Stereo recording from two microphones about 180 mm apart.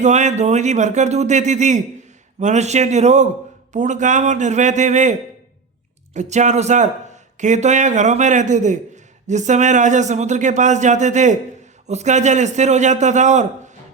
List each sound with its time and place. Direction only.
0.0 s a man's voice: 40° right (ahead or behind)
6.1 s speech: 40° right (ahead or behind)